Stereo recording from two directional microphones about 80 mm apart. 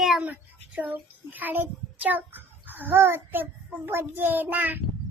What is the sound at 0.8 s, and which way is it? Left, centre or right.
A child's voice, right.